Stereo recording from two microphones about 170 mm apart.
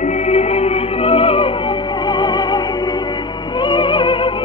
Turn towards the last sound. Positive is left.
turn(degrees=30)  # may be behind; listen again after turning